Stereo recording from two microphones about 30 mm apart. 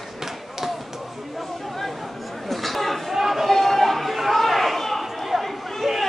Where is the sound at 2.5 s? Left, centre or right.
Centre.